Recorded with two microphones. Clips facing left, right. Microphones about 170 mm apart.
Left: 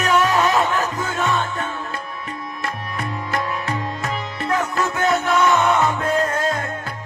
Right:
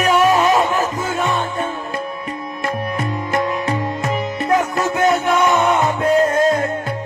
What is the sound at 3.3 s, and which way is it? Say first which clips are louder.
Music: right 5 dB; 20° right (ahead or behind).